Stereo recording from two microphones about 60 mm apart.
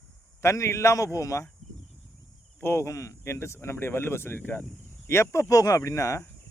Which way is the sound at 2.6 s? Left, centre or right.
Left.